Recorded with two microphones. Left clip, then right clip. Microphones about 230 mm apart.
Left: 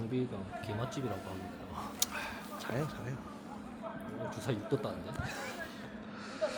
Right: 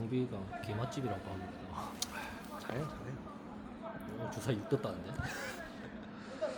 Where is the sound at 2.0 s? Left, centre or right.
Left.